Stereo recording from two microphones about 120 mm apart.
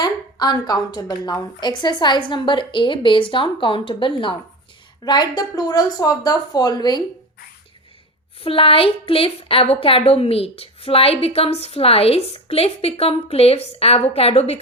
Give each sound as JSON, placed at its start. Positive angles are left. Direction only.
{"t": 0.0, "sound": "a woman's voice", "side_deg": 35}
{"t": 8.4, "sound": "a woman's voice", "side_deg": 50}